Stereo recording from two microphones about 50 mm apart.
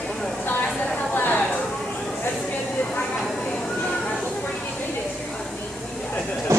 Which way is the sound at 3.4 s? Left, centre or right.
Centre.